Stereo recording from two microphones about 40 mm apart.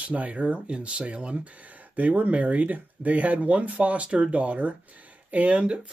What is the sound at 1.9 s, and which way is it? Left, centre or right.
Speech, right.